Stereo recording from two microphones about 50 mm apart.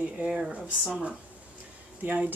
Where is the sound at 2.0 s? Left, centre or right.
Right.